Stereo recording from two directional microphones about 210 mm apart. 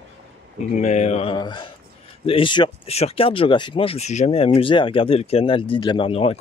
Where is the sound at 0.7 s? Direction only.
35° left (ahead or behind).